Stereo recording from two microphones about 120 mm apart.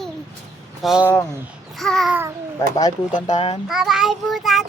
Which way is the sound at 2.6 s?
30° left (ahead or behind).